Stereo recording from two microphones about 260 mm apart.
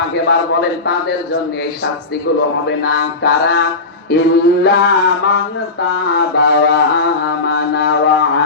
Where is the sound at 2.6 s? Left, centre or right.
Left.